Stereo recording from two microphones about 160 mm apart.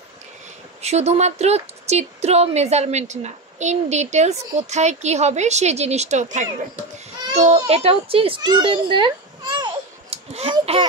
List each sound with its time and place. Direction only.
0.8 s a child's voice: 45° right (ahead or behind)